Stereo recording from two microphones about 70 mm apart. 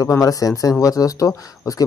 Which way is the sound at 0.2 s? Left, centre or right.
Left.